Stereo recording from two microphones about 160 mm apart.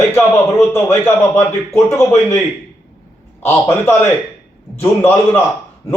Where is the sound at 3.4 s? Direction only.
15° left (ahead or behind).